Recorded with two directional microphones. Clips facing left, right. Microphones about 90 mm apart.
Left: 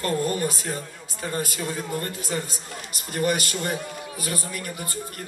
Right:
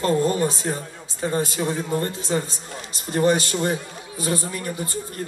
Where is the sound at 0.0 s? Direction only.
25° right (ahead or behind).